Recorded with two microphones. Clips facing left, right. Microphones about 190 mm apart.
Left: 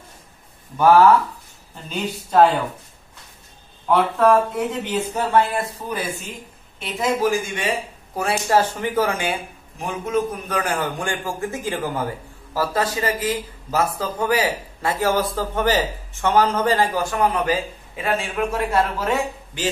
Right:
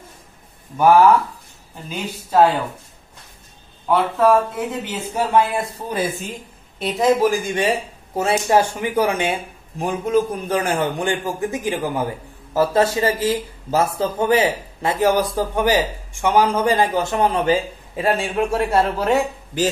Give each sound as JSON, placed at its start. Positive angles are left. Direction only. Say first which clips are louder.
{"t": 0.7, "sound": "speech", "louder": "right 1 dB", "side_deg": -10}
{"t": 3.8, "sound": "speech", "louder": "even", "side_deg": -5}
{"t": 6.8, "sound": "speech", "louder": "right 5 dB", "side_deg": -35}
{"t": 8.1, "sound": "a man's voice", "louder": "right 3 dB", "side_deg": -25}
{"t": 12.5, "sound": "a man's voice", "louder": "right 5 dB", "side_deg": -25}